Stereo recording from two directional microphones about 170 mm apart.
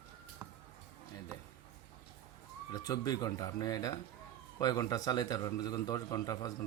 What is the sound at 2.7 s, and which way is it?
A man's voice, 20° left (ahead or behind).